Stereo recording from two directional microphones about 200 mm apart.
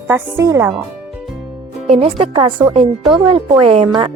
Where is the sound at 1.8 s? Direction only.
30° right (ahead or behind).